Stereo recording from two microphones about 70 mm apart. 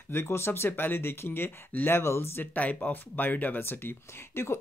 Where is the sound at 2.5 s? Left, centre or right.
Left.